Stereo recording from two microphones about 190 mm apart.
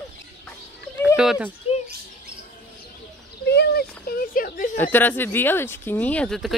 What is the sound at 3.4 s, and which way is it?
Speech, 60° left (ahead or behind).